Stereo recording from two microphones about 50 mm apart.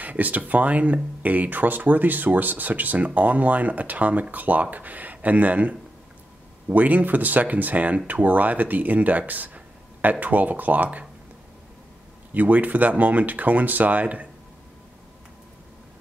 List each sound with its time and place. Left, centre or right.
0.0 s speech: right
12.4 s speech: right